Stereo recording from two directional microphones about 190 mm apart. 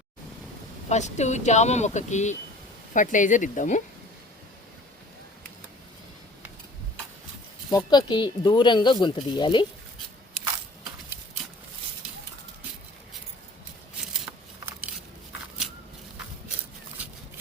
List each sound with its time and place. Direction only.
0.9 s speech: 40° left (ahead or behind)
7.7 s speech: 20° left (ahead or behind)